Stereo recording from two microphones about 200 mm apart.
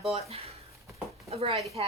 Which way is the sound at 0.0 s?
30° right (ahead or behind).